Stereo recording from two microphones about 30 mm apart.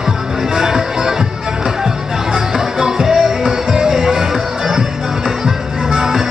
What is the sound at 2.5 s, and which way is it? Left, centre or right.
Music, centre.